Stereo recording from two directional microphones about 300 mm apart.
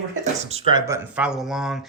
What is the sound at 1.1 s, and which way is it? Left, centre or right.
Speech, centre.